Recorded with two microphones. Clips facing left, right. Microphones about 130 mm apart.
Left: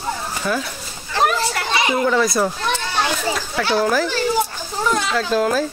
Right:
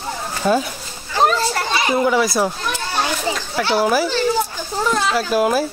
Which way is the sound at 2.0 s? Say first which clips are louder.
Even; 5° right (ahead or behind).